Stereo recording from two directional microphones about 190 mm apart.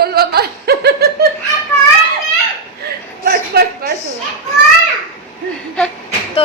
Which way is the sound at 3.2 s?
55° right (ahead or behind).